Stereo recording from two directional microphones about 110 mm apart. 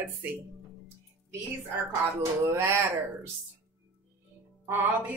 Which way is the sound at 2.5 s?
25° right (ahead or behind).